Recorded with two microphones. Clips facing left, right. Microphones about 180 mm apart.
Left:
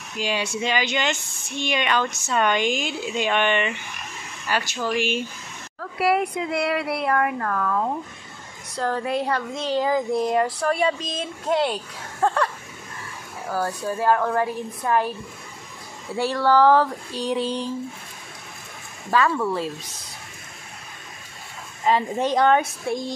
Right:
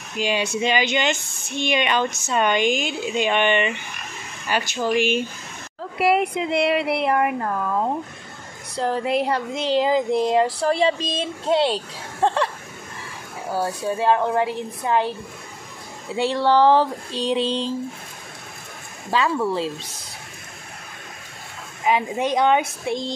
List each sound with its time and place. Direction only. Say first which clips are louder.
0.2 s speech: right 3 dB; 20° right (ahead or behind)
13.5 s speech: right 2 dB; 25° right (ahead or behind)
16.2 s speech: right 1 dB; 25° right (ahead or behind)
19.0 s speech: even; 25° right (ahead or behind)
21.8 s speech: even; 10° right (ahead or behind)